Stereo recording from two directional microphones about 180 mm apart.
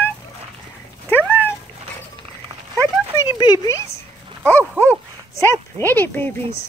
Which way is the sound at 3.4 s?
20° left (ahead or behind).